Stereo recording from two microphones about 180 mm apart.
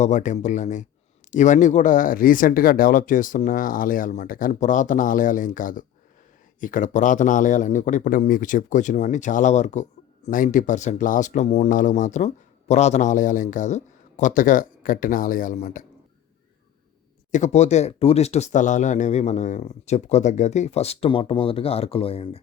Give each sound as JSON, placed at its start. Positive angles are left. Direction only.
{"t": 0.0, "sound": "speech", "side_deg": 45}
{"t": 17.3, "sound": "speech", "side_deg": 40}